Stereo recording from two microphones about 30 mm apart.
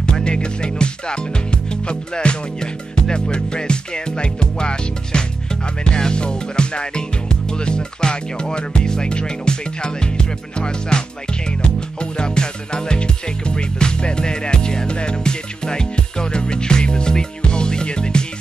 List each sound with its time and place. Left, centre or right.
0.0 s speech: left
15.0 s music: left